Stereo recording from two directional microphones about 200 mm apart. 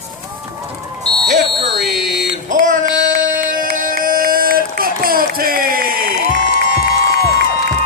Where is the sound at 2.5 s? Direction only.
40° right (ahead or behind).